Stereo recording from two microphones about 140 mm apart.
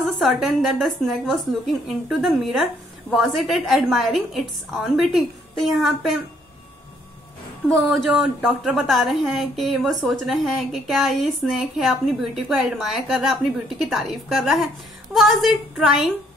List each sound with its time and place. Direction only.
0.0 s a woman's voice: centre (ahead or behind)
7.6 s a woman's voice: centre (ahead or behind)
8.1 s a woman's voice: 10° right (ahead or behind)